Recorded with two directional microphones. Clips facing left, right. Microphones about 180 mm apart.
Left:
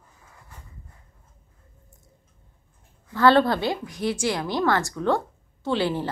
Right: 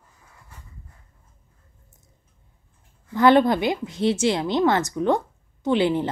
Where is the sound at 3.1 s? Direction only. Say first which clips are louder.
Right 2 dB; 20° right (ahead or behind).